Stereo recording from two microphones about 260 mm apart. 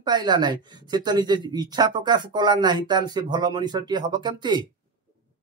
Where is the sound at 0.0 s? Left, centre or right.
Centre.